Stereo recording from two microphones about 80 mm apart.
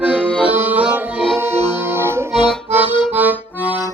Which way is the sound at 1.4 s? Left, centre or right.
Right.